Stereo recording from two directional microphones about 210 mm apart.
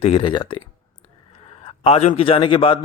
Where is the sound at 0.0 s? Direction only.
25° left (ahead or behind).